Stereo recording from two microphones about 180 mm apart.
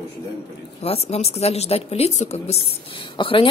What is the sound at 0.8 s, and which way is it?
A woman's voice, 35° left (ahead or behind).